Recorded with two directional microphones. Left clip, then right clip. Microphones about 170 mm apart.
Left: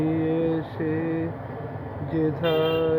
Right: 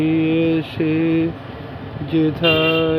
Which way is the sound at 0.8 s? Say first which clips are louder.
Right 8 dB; 65° right (ahead or behind).